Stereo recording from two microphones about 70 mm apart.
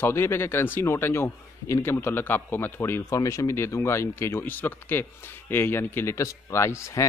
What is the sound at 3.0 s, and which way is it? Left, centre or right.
Speech, left.